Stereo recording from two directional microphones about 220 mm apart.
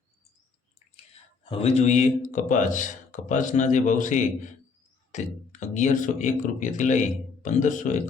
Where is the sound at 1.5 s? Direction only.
30° left (ahead or behind).